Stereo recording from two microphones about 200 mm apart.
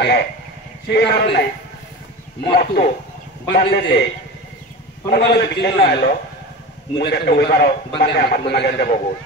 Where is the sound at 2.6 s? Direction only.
45° left (ahead or behind).